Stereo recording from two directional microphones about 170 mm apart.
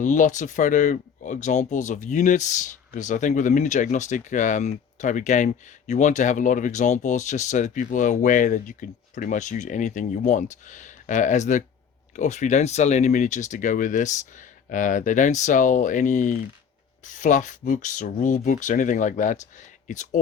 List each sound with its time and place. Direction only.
0.0 s speech: 50° left (ahead or behind)